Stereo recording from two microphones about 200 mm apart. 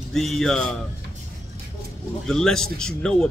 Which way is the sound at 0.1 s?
Centre (ahead or behind).